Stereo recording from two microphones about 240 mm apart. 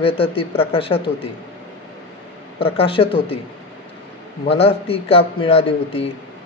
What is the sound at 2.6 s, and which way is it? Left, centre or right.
Speech, left.